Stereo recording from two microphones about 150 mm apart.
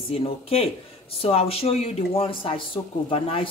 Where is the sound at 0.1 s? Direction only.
40° left (ahead or behind).